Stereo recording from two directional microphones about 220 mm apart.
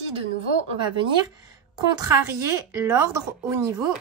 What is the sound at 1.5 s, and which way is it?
Speech, 15° right (ahead or behind).